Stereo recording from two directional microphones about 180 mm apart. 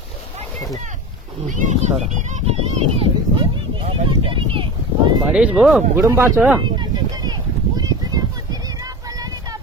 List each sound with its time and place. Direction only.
1.4 s a child's voice: 40° right (ahead or behind)
5.2 s speech: 5° right (ahead or behind)
6.0 s speech: 15° right (ahead or behind)
6.6 s a sound: 25° right (ahead or behind)